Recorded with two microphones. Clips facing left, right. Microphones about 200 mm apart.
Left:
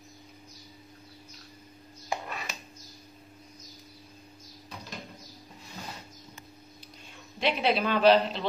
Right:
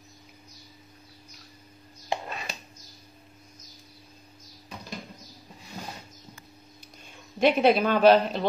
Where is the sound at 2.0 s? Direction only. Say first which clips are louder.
Right 3 dB; 30° right (ahead or behind).